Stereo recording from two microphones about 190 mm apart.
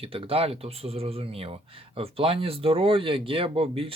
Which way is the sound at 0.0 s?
30° right (ahead or behind).